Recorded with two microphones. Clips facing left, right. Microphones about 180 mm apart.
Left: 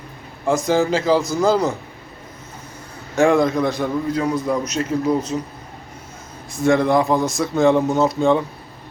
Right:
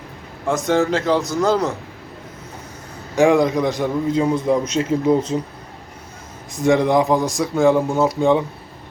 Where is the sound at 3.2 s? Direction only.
15° right (ahead or behind).